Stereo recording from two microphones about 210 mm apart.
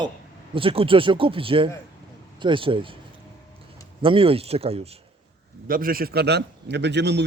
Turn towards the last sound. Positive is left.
turn(degrees=-55)  # may be behind; listen again after turning